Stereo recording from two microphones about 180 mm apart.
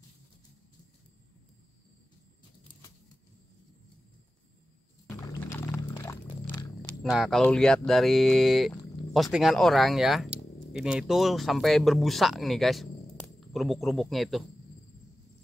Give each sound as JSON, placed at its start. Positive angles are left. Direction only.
{"t": 2.7, "sound": "patter", "side_deg": 25}
{"t": 5.1, "sound": "music", "side_deg": 15}
{"t": 7.0, "sound": "speech", "side_deg": 0}